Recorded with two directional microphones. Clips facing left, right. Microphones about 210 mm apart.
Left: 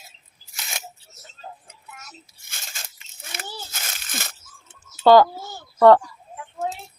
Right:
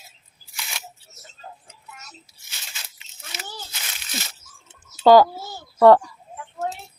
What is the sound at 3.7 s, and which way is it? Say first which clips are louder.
Crumpling: even; 45° left (ahead or behind).